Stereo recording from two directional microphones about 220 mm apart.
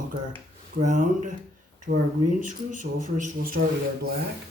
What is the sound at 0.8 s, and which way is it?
Speech, 35° right (ahead or behind).